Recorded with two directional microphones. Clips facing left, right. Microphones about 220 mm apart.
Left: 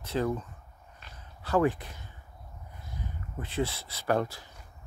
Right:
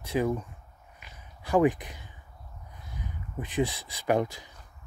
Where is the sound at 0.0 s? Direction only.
15° right (ahead or behind).